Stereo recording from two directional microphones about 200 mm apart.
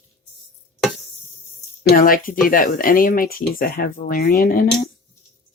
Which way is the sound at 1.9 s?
45° left (ahead or behind).